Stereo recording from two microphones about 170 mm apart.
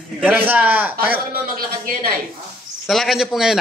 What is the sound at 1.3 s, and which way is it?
Speech, 60° right (ahead or behind).